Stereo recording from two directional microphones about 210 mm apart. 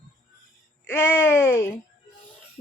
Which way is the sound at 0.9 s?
10° left (ahead or behind).